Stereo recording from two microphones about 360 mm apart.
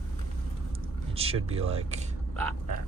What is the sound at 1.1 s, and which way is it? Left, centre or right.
Speech, centre.